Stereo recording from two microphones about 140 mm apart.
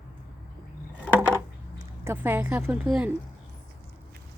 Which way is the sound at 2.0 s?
15° right (ahead or behind).